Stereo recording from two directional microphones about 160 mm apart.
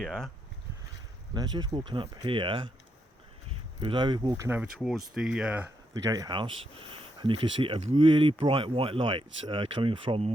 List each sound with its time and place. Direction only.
0.0 s speech: centre (ahead or behind)
1.3 s speech: 25° right (ahead or behind)
3.8 s speech: 30° right (ahead or behind)
4.4 s speech: 10° right (ahead or behind)
5.9 s speech: 20° right (ahead or behind)